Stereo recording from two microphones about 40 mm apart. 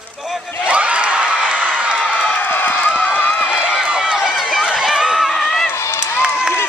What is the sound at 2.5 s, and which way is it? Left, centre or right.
Run, left.